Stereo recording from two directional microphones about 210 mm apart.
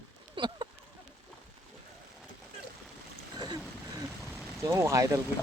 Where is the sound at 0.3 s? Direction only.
20° right (ahead or behind).